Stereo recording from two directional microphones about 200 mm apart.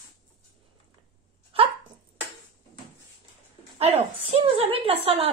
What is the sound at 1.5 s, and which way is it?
Dog, 30° right (ahead or behind).